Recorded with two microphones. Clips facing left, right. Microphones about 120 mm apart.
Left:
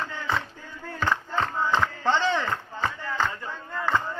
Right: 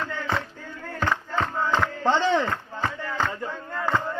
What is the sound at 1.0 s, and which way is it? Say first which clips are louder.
Chop: even; 5° right (ahead or behind).